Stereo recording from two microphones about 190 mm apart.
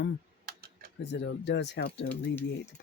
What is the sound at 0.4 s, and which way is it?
Typing, 50° right (ahead or behind).